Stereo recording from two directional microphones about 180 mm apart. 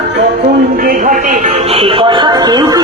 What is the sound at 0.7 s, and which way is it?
Speech, 50° right (ahead or behind).